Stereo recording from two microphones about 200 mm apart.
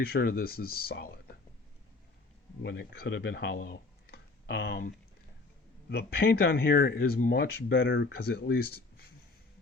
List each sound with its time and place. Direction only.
0.0 s speech: 50° left (ahead or behind)
2.6 s speech: 55° left (ahead or behind)
5.9 s speech: 55° left (ahead or behind)